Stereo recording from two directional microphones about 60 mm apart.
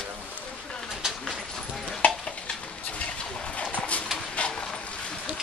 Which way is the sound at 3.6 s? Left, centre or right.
Centre.